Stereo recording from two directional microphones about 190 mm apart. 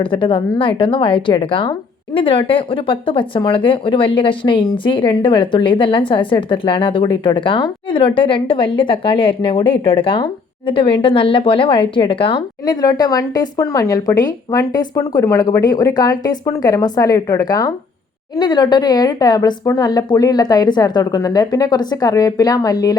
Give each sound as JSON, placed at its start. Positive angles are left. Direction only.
{"t": 0.0, "sound": "speech", "side_deg": 25}